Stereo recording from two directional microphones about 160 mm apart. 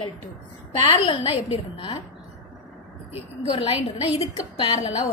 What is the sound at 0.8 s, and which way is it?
A woman's voice, 30° left (ahead or behind).